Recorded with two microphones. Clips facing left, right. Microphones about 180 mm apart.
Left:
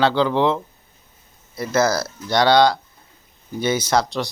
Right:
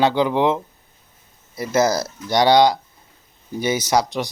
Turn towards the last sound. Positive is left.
turn(degrees=-15)  # may be behind; listen again after turning